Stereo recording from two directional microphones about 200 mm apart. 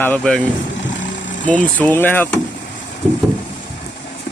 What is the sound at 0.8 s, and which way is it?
Vehicle, 65° left (ahead or behind).